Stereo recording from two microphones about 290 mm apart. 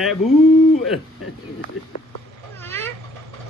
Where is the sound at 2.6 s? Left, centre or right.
Centre.